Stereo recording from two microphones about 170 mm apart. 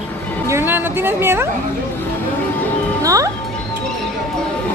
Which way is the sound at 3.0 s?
20° right (ahead or behind).